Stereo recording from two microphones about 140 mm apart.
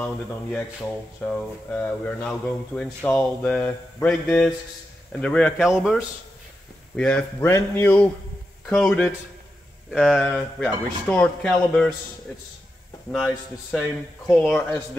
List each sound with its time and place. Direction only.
0.0 s speech: 10° left (ahead or behind)
5.6 s speech: 5° right (ahead or behind)
7.0 s speech: 10° left (ahead or behind)
8.6 s speech: 5° left (ahead or behind)
13.1 s speech: centre (ahead or behind)